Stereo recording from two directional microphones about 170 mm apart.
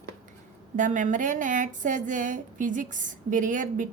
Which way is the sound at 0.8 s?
50° right (ahead or behind).